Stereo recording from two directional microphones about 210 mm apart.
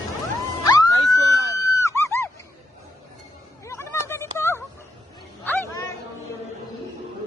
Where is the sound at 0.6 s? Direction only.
20° left (ahead or behind).